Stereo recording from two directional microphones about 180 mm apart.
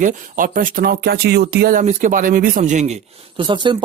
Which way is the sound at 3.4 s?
25° right (ahead or behind).